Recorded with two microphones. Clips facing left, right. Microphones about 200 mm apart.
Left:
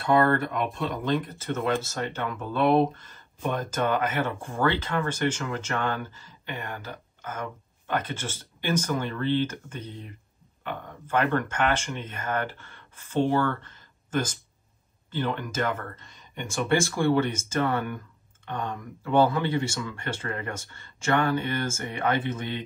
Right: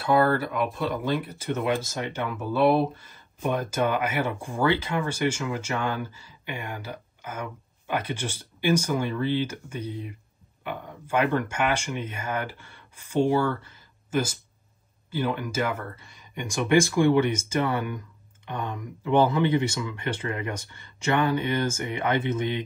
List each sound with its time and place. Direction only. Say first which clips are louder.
0.0 s speech: even; 5° right (ahead or behind); by 22.6 s 20° right (ahead or behind)